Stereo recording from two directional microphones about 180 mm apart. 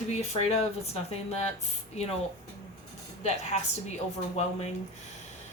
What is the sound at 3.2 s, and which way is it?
Speech, 40° left (ahead or behind).